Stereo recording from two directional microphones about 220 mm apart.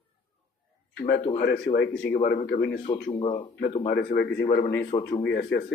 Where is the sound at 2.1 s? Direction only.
40° left (ahead or behind).